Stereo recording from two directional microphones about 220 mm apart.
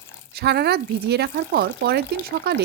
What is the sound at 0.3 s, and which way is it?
Speech, 45° right (ahead or behind).